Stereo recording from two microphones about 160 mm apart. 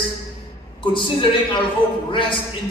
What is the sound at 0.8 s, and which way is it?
A man's voice, 30° left (ahead or behind).